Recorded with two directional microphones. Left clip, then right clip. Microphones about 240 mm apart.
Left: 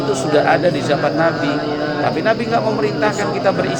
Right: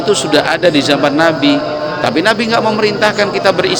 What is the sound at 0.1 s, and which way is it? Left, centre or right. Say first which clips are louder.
A man's voice: right 3 dB; right.